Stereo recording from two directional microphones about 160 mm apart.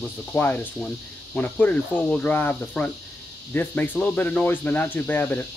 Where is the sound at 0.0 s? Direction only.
10° left (ahead or behind).